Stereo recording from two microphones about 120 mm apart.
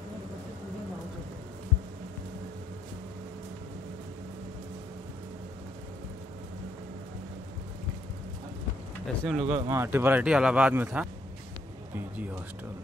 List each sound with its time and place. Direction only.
9.0 s speech: centre (ahead or behind)
9.7 s speech: 20° right (ahead or behind)